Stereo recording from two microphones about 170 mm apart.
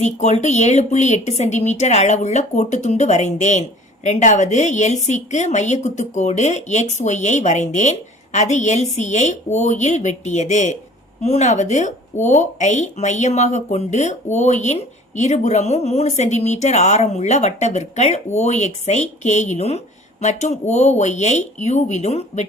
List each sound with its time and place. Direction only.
0.0 s speech: 40° left (ahead or behind)